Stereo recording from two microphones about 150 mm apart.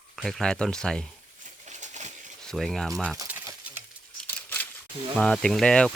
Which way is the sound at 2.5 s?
Centre (ahead or behind).